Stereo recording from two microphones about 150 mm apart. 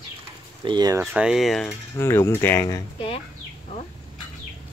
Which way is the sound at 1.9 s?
15° left (ahead or behind).